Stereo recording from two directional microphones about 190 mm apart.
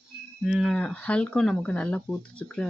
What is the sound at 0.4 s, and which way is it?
Speech, centre (ahead or behind).